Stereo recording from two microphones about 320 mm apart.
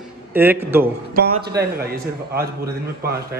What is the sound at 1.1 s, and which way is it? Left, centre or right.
Speech, right.